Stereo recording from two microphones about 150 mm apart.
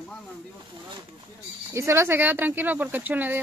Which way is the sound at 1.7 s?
20° right (ahead or behind).